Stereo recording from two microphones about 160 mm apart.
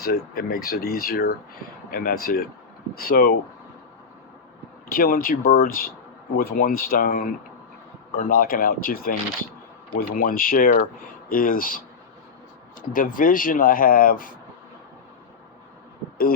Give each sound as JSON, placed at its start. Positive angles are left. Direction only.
{"t": 0.0, "sound": "speech", "side_deg": 70}
{"t": 4.9, "sound": "speech", "side_deg": 65}
{"t": 12.9, "sound": "speech", "side_deg": 60}